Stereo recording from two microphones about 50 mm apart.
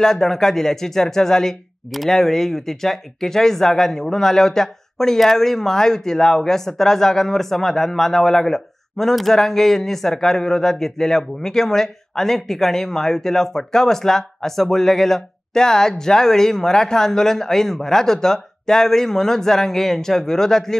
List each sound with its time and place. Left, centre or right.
0.0 s speech: centre